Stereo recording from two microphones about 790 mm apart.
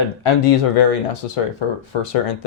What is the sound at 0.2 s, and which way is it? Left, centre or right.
Speech, left.